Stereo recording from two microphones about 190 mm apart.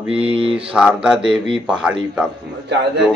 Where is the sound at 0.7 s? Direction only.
5° right (ahead or behind).